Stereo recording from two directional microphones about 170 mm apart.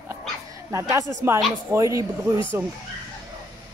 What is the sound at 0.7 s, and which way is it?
Speech, 20° right (ahead or behind).